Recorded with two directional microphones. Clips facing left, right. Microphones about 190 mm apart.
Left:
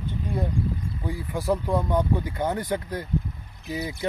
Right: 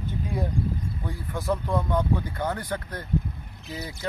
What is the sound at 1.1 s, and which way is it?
Speech, 10° left (ahead or behind).